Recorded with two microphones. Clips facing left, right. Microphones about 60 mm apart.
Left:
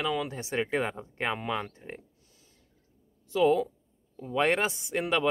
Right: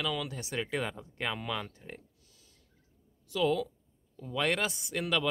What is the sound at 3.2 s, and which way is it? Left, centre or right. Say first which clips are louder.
A woman's voice: left 5 dB; left.